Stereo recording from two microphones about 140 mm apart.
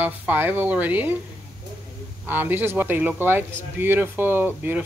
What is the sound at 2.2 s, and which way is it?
Speech, 15° right (ahead or behind).